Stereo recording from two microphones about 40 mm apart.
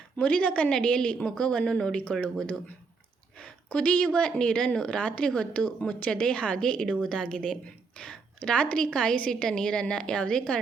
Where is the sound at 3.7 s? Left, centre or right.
Left.